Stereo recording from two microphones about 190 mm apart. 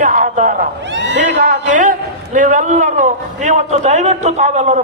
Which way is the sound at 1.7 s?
45° right (ahead or behind).